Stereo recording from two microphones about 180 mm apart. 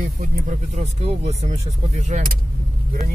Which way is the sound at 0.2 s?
40° right (ahead or behind).